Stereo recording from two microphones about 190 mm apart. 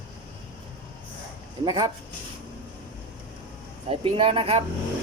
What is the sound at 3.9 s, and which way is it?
Speech, 30° right (ahead or behind).